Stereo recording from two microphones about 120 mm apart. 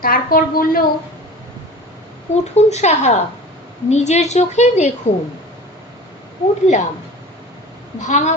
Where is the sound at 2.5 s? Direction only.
65° left (ahead or behind).